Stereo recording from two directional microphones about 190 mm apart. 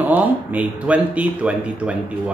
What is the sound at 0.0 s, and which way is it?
Speech, 10° right (ahead or behind).